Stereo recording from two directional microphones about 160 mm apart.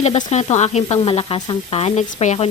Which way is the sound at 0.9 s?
35° left (ahead or behind).